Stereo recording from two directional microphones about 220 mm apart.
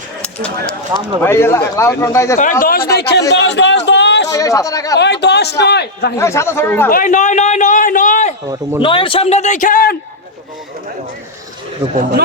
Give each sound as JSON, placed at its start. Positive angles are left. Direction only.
{"t": 1.2, "sound": "speech", "side_deg": 10}
{"t": 2.4, "sound": "speech", "side_deg": 40}
{"t": 4.3, "sound": "speech", "side_deg": 15}
{"t": 4.9, "sound": "a man's voice", "side_deg": 50}
{"t": 6.1, "sound": "speech", "side_deg": 10}
{"t": 6.9, "sound": "a man's voice", "side_deg": 35}
{"t": 8.8, "sound": "a man's voice", "side_deg": 25}